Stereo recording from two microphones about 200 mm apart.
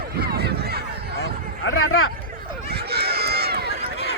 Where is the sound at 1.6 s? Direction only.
90° left.